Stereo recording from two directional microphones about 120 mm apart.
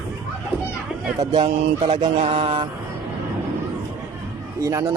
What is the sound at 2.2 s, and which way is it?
Speech, 55° right (ahead or behind).